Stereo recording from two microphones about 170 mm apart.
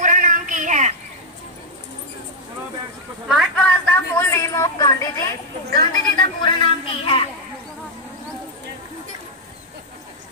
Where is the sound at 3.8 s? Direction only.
15° left (ahead or behind).